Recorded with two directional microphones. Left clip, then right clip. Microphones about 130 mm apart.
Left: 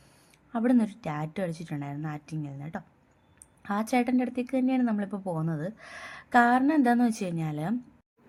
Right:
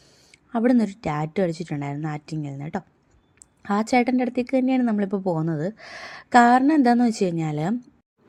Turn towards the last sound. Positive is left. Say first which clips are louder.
# right 7 dB
turn(degrees=-40)  # may be behind; listen again after turning